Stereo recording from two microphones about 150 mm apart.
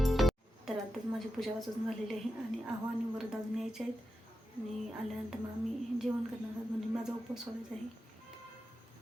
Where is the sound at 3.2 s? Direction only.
Centre (ahead or behind).